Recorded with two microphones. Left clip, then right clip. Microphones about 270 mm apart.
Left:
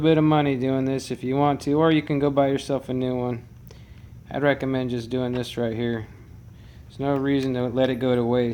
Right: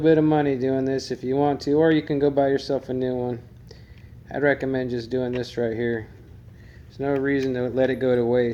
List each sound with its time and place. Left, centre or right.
0.0 s speech: left